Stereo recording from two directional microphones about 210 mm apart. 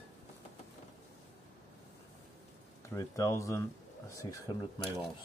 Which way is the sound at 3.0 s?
15° left (ahead or behind).